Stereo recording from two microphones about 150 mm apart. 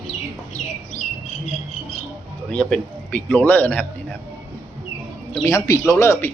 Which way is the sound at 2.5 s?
5° left (ahead or behind).